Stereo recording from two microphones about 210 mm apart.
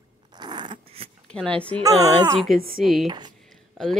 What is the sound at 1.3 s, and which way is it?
Speech, 5° left (ahead or behind).